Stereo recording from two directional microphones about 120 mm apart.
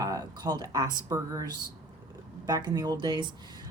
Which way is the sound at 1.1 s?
30° right (ahead or behind).